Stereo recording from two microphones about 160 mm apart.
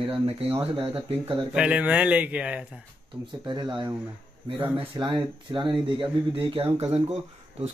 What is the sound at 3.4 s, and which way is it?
Speech, 25° right (ahead or behind).